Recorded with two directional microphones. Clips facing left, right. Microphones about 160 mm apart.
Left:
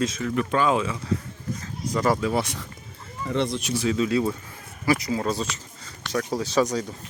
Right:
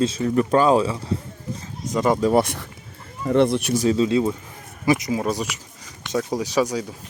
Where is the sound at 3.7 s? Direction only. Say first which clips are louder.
Right 2 dB; 35° right (ahead or behind); by 7.0 s 10° right (ahead or behind).